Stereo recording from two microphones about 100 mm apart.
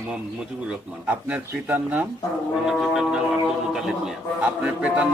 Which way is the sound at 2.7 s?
5° right (ahead or behind).